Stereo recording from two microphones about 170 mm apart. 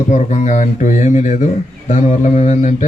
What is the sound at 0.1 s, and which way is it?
Speech, 45° left (ahead or behind).